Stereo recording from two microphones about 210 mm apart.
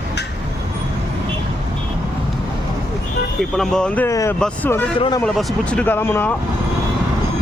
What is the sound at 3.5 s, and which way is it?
Speech, 5° left (ahead or behind).